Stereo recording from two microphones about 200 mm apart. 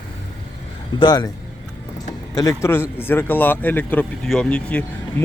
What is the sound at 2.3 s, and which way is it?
Speech, 15° left (ahead or behind).